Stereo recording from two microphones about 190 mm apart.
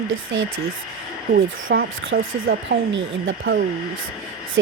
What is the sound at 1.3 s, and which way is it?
Speech, 50° right (ahead or behind).